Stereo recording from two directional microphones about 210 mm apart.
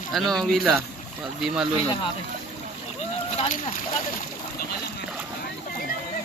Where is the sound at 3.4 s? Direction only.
30° left (ahead or behind).